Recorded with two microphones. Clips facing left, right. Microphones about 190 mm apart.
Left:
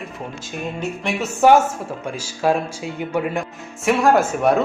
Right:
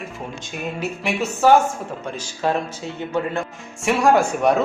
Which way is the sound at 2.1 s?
10° left (ahead or behind).